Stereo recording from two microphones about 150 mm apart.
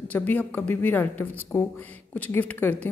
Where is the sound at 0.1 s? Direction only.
10° left (ahead or behind).